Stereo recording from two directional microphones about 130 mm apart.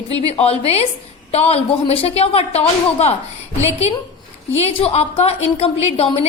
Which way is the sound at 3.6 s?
55° left (ahead or behind).